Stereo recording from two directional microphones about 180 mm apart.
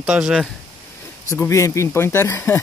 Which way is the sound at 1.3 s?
15° left (ahead or behind).